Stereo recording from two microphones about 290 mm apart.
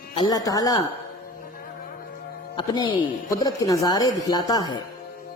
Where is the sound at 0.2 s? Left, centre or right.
Centre.